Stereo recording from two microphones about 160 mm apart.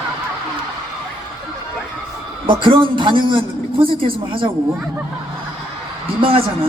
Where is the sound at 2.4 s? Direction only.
30° right (ahead or behind).